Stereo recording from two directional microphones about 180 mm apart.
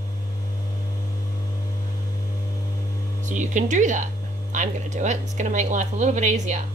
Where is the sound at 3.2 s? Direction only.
45° right (ahead or behind).